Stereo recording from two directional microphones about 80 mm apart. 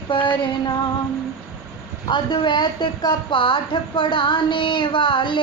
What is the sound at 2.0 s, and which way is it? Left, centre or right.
A woman's voice, left.